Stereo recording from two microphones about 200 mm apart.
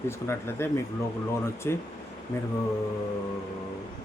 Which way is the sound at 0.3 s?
10° left (ahead or behind).